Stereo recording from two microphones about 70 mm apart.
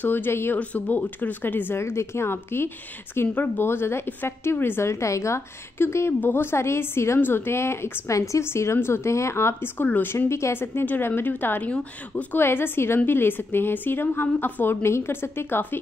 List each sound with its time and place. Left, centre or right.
0.0 s a woman's voice: left
0.6 s a woman's voice: left
10.1 s a woman's voice: left; by 12.4 s centre
12.4 s a woman's voice: left